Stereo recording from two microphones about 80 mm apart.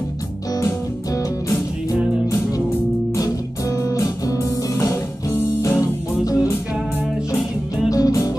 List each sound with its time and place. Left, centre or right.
3.7 s music: left
7.9 s music: left